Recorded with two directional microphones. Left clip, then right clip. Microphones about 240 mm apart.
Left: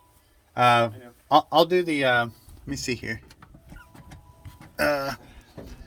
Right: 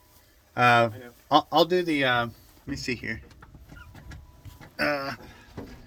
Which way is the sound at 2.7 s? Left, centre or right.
Left.